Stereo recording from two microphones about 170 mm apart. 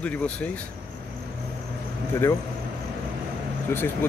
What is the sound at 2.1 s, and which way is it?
Speech, 15° left (ahead or behind).